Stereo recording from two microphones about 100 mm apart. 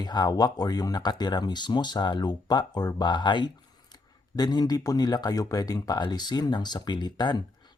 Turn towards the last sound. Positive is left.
turn(degrees=45)  # may be behind; listen again after turning